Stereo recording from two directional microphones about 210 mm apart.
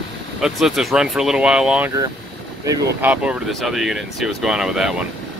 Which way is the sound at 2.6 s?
15° right (ahead or behind).